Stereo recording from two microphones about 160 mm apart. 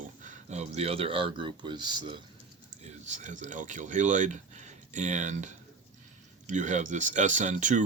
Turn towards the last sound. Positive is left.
turn(degrees=-50)  # may be behind; listen again after turning